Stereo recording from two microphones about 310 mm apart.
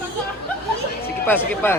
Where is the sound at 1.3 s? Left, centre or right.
Centre.